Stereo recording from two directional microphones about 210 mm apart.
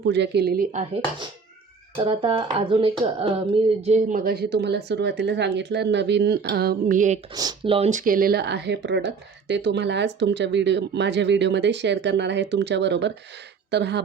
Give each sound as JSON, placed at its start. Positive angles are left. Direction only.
{"t": 0.0, "sound": "speech", "side_deg": -55}
{"t": 2.0, "sound": "speech", "side_deg": -25}
{"t": 3.8, "sound": "speech", "side_deg": -35}
{"t": 7.3, "sound": "speech", "side_deg": -20}